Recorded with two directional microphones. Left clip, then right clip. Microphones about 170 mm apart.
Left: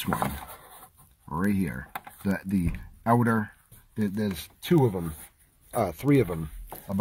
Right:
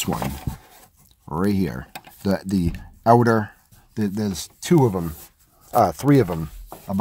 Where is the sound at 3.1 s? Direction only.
30° right (ahead or behind).